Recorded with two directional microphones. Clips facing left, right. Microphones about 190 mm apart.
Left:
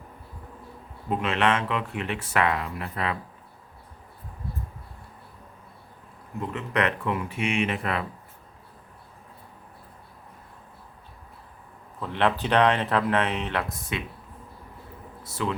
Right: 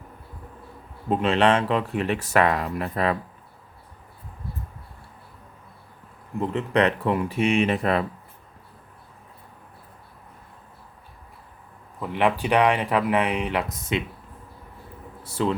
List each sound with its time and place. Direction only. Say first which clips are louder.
1.1 s speech: right 5 dB; 30° right (ahead or behind)
6.5 s speech: right 5 dB; 30° right (ahead or behind)
11.9 s speech: right 2 dB; 10° right (ahead or behind)
15.2 s speech: right 5 dB; 30° right (ahead or behind)